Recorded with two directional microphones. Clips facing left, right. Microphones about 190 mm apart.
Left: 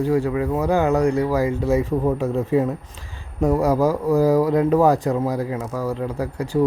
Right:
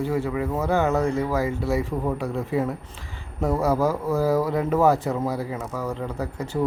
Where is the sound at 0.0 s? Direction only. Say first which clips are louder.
Left 5 dB; 15° left (ahead or behind).